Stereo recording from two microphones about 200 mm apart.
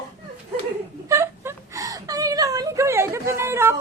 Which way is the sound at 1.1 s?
15° right (ahead or behind).